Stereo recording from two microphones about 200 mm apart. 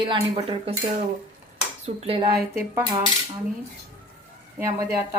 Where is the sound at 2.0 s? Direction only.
30° right (ahead or behind).